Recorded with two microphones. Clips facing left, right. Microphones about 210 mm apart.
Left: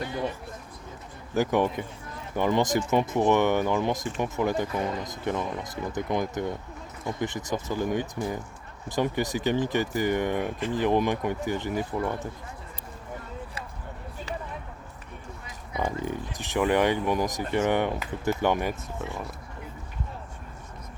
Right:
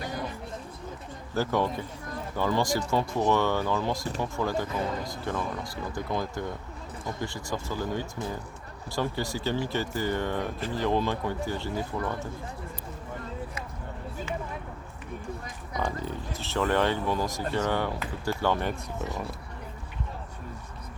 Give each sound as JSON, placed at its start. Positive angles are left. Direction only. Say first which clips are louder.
{"t": 1.3, "sound": "speech", "louder": "left 3 dB", "side_deg": 15}
{"t": 15.8, "sound": "speech", "louder": "left 3 dB", "side_deg": 15}